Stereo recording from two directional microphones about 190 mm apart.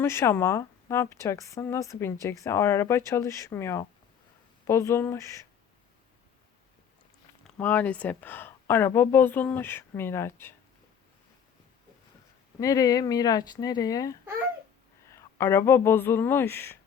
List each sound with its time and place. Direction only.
0.0 s speech: 15° left (ahead or behind)
7.4 s speech: 10° left (ahead or behind)
12.5 s speech: 15° left (ahead or behind)